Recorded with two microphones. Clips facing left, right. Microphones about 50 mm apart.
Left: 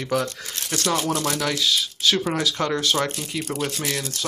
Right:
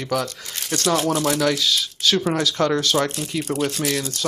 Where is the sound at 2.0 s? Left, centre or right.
Left.